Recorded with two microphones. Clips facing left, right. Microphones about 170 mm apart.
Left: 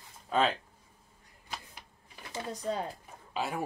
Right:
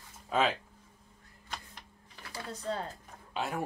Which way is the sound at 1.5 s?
10° left (ahead or behind).